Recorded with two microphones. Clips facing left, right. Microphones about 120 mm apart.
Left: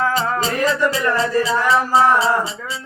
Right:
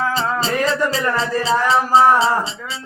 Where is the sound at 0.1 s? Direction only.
30° right (ahead or behind).